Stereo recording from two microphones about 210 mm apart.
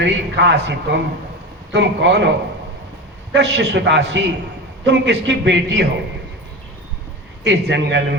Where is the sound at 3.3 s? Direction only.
60° right (ahead or behind).